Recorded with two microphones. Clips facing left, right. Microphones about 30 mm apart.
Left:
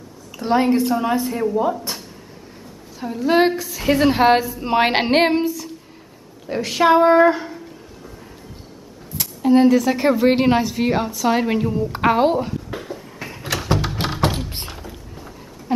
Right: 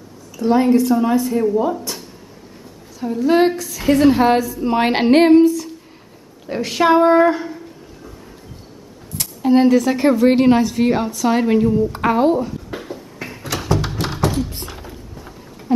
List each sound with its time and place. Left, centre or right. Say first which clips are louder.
0.4 s a woman's voice: right 3 dB; left; by 1.8 s centre
3.0 s a woman's voice: right 2 dB; centre
6.4 s speech: even; centre
9.1 s speech: right 1 dB; centre
10.1 s a woman's voice: right 5 dB; centre
12.7 s a sound: right 1 dB; centre
14.0 s a sound: even; left